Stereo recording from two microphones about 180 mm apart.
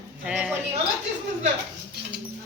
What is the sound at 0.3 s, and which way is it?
Cutlery, 5° right (ahead or behind).